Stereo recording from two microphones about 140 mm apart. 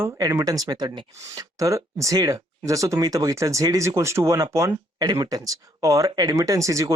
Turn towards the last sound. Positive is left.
turn(degrees=-20)  # may be behind; listen again after turning